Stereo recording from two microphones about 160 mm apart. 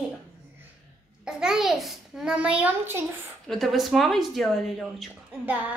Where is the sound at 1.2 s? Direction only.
5° right (ahead or behind).